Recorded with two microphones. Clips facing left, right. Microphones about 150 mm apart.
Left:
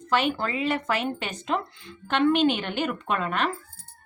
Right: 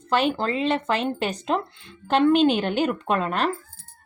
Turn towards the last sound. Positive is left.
turn(degrees=-35)  # may be behind; listen again after turning